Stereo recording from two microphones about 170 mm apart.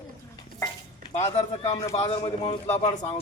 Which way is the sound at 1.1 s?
40° left (ahead or behind).